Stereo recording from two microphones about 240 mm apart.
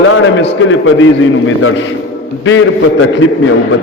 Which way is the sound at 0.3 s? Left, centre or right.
Left.